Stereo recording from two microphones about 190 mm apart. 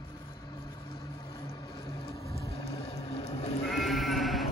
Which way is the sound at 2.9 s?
30° left (ahead or behind).